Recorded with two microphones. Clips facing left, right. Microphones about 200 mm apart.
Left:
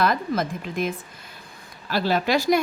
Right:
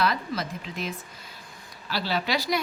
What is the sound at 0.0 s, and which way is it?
A woman's voice, 50° left (ahead or behind).